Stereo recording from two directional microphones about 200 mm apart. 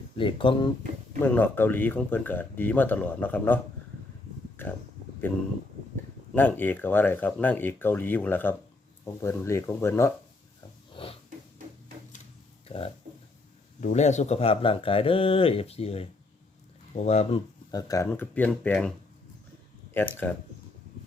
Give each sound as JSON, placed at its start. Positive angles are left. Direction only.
{"t": 0.2, "sound": "speech", "side_deg": 25}
{"t": 1.2, "sound": "speech", "side_deg": 10}
{"t": 6.3, "sound": "speech", "side_deg": 10}
{"t": 10.9, "sound": "snort", "side_deg": 25}
{"t": 12.6, "sound": "a sound", "side_deg": 30}
{"t": 13.8, "sound": "speech", "side_deg": 35}
{"t": 17.7, "sound": "speech", "side_deg": 20}
{"t": 19.9, "sound": "speech", "side_deg": 10}